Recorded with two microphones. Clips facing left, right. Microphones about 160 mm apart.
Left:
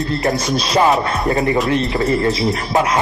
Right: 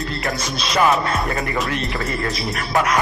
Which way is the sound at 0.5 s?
30° left (ahead or behind).